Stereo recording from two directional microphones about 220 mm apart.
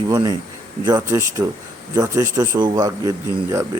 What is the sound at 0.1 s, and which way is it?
Speech, 15° right (ahead or behind).